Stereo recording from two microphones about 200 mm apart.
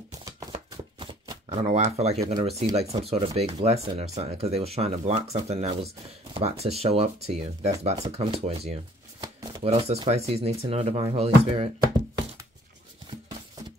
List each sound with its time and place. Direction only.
0.2 s shuffling cards: 20° right (ahead or behind)
1.7 s speech: 35° right (ahead or behind)
9.2 s chopping: 15° right (ahead or behind)
9.7 s speech: 30° right (ahead or behind)